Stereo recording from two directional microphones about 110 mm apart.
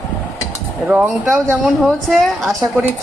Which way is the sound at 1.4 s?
5° left (ahead or behind).